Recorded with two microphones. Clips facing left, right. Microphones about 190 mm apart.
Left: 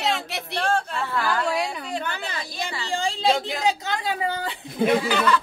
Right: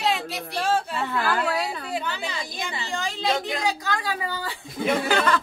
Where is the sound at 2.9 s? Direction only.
30° left (ahead or behind).